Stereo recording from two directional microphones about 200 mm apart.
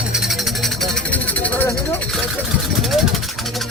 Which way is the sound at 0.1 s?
Centre (ahead or behind).